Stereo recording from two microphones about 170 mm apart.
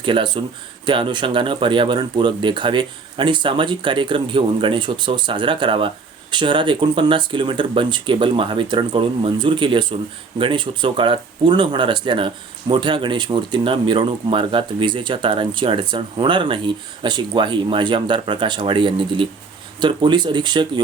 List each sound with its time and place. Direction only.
0.0 s speech: 30° right (ahead or behind)